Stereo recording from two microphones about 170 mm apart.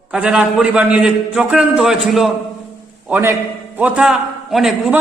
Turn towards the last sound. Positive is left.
turn(degrees=0)  # may be behind; listen again after turning